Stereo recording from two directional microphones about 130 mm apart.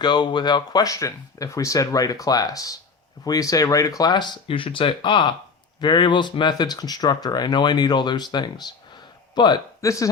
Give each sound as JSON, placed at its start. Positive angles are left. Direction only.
{"t": 0.0, "sound": "a man's voice", "side_deg": 35}